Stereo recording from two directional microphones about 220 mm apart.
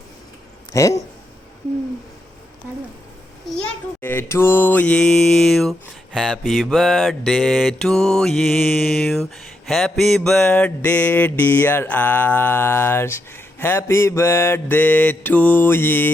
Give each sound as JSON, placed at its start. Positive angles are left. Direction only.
{"t": 0.7, "sound": "mantra", "side_deg": 15}
{"t": 4.0, "sound": "mantra", "side_deg": 10}